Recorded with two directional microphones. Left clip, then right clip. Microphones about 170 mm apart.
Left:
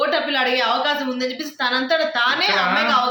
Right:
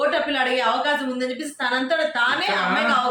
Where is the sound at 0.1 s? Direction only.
20° left (ahead or behind).